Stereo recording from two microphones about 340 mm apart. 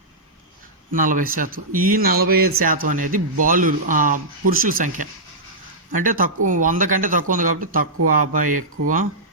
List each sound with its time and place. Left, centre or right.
0.9 s speech: right
2.2 s speech: right
2.6 s speech: right